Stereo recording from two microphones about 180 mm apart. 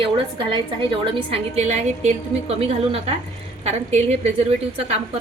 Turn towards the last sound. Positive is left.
turn(degrees=-35)  # may be behind; listen again after turning